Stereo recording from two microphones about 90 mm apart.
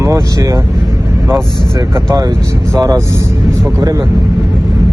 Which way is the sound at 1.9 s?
40° right (ahead or behind).